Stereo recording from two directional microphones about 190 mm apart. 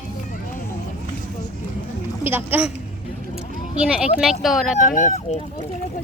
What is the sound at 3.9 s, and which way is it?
Speech, 5° right (ahead or behind).